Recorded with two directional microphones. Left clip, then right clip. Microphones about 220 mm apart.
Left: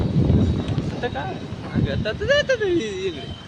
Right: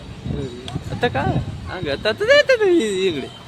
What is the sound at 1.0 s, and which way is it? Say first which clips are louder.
Speech: right 10 dB; 30° right (ahead or behind).